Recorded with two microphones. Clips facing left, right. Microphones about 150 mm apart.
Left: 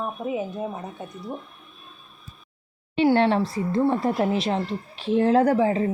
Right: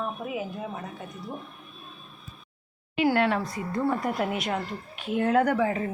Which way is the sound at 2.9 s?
30° left (ahead or behind).